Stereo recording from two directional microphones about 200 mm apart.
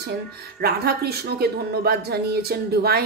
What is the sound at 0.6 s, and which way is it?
Speech, 50° right (ahead or behind).